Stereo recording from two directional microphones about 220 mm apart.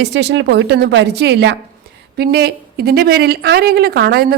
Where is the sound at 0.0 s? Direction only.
50° right (ahead or behind).